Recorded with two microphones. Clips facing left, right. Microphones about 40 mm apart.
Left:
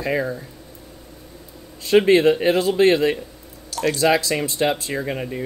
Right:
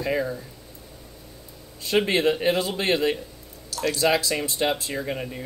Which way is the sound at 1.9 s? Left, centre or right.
Left.